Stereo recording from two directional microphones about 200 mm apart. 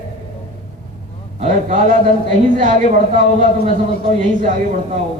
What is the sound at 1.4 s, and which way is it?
Speech, 40° right (ahead or behind).